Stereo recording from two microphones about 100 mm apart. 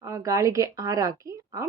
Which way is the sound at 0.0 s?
30° right (ahead or behind).